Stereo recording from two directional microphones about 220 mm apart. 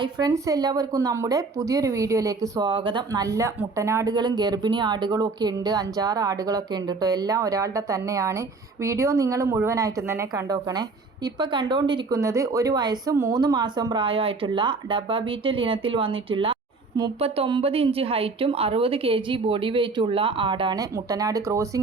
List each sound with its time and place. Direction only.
0.0 s a woman's voice: 15° right (ahead or behind)